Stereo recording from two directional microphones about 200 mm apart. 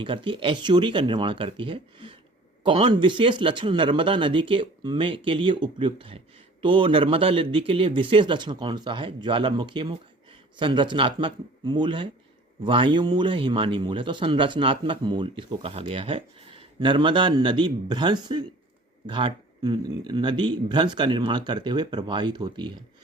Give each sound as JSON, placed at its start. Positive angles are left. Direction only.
{"t": 0.0, "sound": "speech", "side_deg": -25}